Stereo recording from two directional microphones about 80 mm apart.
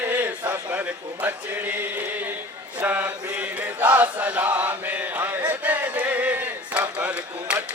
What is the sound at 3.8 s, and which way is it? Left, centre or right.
Chant, right.